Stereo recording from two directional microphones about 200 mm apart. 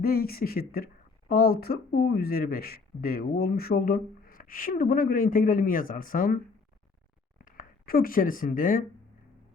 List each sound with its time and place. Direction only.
0.0 s speech: 50° left (ahead or behind)
7.4 s speech: 45° left (ahead or behind)